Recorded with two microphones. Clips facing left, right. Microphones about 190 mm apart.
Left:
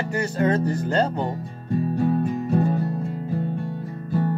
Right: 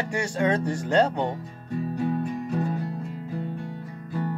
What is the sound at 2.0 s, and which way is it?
Music, 45° left (ahead or behind).